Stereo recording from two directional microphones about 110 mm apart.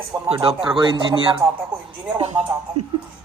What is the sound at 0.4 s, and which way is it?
Speech, 50° right (ahead or behind).